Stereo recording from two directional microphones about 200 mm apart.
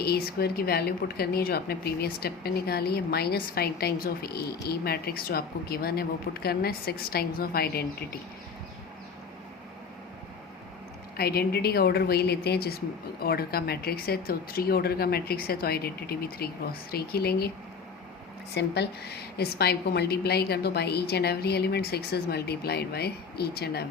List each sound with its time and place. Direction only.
0.0 s a woman's voice: 50° left (ahead or behind)
11.2 s a woman's voice: 50° left (ahead or behind)
18.5 s a woman's voice: 55° left (ahead or behind)